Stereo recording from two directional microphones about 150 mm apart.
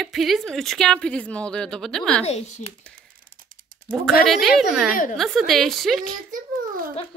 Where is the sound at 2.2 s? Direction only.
45° left (ahead or behind).